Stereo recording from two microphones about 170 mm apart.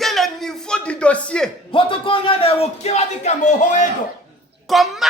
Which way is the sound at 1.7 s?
30° left (ahead or behind).